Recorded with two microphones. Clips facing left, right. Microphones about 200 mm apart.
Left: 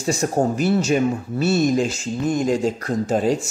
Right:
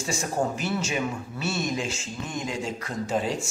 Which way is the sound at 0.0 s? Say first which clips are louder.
Left 7 dB; 40° left (ahead or behind).